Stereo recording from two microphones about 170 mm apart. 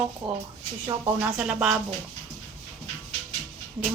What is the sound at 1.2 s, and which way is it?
Speech, 5° right (ahead or behind).